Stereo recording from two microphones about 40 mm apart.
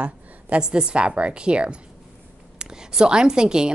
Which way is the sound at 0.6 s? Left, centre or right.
Right.